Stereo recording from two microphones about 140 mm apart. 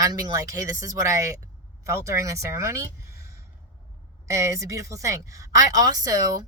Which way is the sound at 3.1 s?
20° right (ahead or behind).